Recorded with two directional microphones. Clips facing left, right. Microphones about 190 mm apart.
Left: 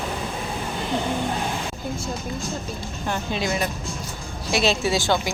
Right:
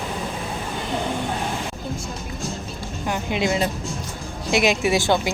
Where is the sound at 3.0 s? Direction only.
15° right (ahead or behind).